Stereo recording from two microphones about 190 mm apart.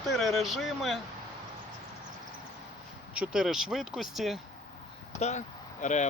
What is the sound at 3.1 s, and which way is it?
Speech, 5° right (ahead or behind).